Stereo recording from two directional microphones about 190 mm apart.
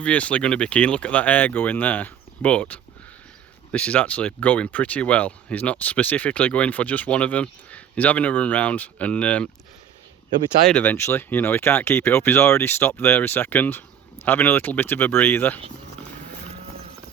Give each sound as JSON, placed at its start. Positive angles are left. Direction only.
{"t": 0.0, "sound": "speech", "side_deg": 5}
{"t": 10.7, "sound": "speech", "side_deg": 10}